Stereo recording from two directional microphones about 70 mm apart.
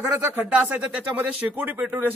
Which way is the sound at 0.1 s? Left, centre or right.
Centre.